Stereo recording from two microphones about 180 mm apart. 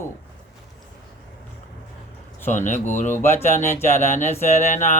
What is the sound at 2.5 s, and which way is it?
Speech, 45° left (ahead or behind).